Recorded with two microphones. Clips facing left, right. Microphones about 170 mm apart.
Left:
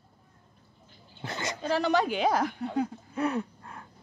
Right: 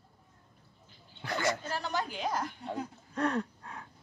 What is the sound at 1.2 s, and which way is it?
Speech, 20° left (ahead or behind).